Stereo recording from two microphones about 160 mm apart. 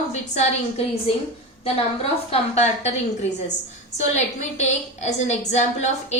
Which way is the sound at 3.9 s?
45° left (ahead or behind).